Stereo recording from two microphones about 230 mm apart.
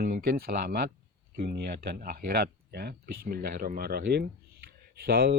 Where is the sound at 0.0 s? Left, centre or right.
Right.